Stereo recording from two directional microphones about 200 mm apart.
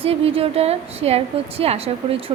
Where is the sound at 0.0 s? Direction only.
30° right (ahead or behind).